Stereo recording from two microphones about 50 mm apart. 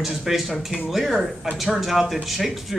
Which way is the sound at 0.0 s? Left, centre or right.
Centre.